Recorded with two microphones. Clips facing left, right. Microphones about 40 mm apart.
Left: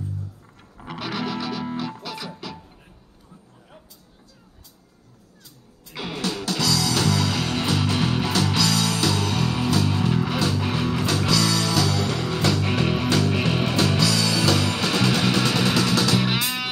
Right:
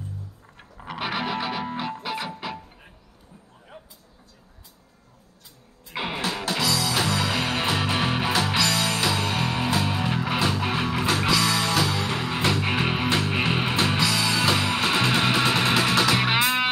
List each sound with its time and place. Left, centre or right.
0.9 s music: right
3.7 s vehicle: right
5.9 s music: right